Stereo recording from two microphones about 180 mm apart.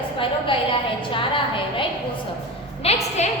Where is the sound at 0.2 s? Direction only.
30° left (ahead or behind).